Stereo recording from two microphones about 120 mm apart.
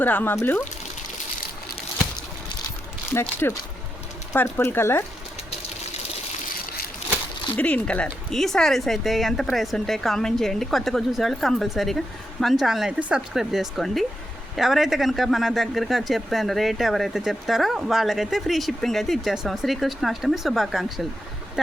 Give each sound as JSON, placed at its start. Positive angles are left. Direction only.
{"t": 0.0, "sound": "speech", "side_deg": 15}
{"t": 3.1, "sound": "speech", "side_deg": 20}
{"t": 7.5, "sound": "speech", "side_deg": 10}